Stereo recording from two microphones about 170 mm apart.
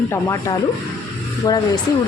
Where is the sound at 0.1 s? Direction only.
15° left (ahead or behind).